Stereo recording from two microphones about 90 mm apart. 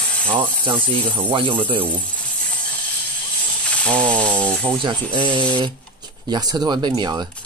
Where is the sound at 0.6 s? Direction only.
65° right (ahead or behind).